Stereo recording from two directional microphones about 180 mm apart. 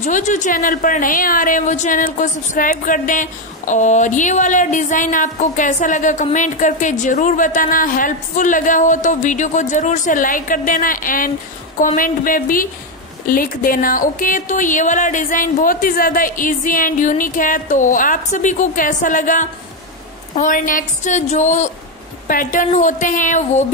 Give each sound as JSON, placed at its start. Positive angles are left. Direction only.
{"t": 0.0, "sound": "a woman's voice", "side_deg": 45}